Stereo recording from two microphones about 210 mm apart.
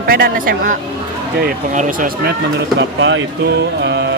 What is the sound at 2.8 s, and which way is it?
Speech, 60° right (ahead or behind).